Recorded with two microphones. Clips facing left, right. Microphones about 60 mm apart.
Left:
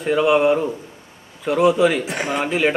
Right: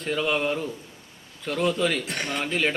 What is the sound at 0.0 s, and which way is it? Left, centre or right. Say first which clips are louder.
Speech: left 9 dB; centre.